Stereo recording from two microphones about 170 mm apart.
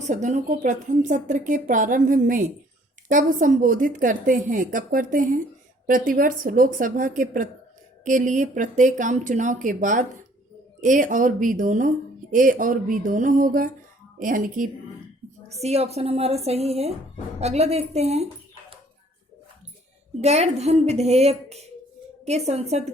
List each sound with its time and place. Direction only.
0.0 s a woman's voice: 45° right (ahead or behind)
15.6 s a woman's voice: 40° right (ahead or behind)
20.2 s a woman's voice: 40° right (ahead or behind)